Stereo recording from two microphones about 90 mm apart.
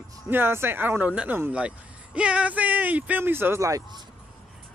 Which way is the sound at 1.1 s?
10° right (ahead or behind).